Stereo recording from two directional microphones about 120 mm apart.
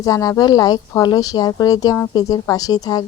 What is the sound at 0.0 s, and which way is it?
Speech, 30° left (ahead or behind).